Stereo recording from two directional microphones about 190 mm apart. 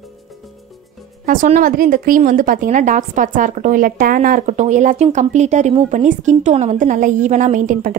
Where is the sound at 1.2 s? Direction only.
45° right (ahead or behind).